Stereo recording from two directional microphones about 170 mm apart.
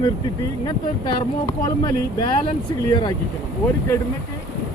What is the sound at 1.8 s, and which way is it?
Speech, 25° left (ahead or behind).